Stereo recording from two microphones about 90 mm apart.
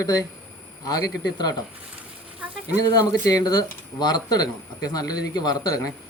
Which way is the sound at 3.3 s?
50° left (ahead or behind).